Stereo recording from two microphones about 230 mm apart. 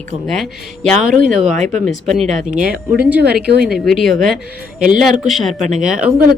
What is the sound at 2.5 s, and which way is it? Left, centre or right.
A woman's voice, centre.